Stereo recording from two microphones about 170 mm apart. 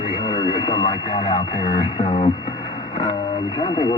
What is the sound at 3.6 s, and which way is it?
Speech, 25° left (ahead or behind).